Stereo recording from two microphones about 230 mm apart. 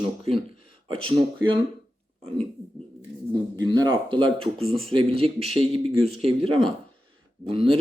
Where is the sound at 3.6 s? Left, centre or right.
Centre.